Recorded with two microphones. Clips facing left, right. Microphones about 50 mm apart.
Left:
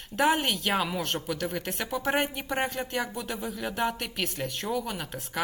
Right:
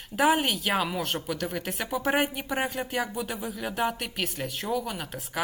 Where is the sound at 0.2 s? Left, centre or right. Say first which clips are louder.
Right 1 dB; centre.